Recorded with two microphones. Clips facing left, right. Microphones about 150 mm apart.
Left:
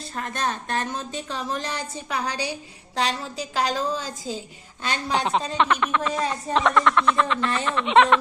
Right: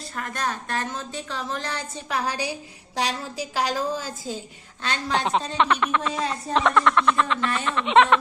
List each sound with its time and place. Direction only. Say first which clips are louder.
0.2 s a woman's voice: left 1 dB; 25° left (ahead or behind)
2.0 s a woman's voice: right 1 dB; 5° right (ahead or behind)
4.8 s a woman's voice: even; 10° left (ahead or behind)